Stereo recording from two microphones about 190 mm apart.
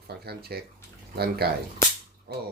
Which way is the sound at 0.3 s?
55° right (ahead or behind).